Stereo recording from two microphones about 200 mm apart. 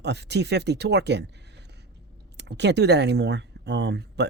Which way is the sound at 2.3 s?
60° right (ahead or behind).